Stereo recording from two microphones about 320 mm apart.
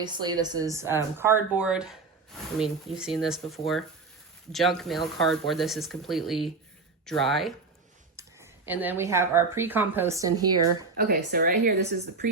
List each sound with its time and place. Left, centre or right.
0.0 s a woman's voice: centre
10.9 s a woman's voice: right